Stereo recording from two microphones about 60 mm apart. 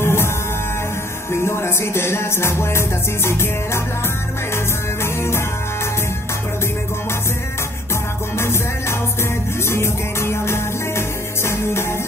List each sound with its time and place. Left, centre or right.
0.0 s music: left
1.3 s music: left
5.0 s music: left
8.4 s music: left